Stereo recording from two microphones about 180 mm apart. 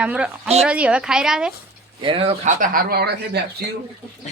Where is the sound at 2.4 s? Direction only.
50° right (ahead or behind).